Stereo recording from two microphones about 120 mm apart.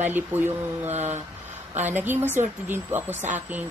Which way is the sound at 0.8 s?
70° right (ahead or behind).